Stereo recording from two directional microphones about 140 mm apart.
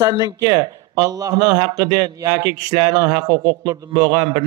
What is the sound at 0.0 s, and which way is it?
Speech, 30° right (ahead or behind).